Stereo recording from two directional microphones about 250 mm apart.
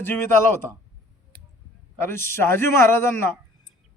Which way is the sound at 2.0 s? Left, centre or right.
Centre.